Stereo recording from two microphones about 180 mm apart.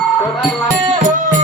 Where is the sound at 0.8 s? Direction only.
45° right (ahead or behind).